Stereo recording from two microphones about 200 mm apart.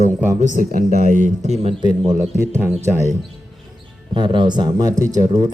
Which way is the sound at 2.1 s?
15° right (ahead or behind).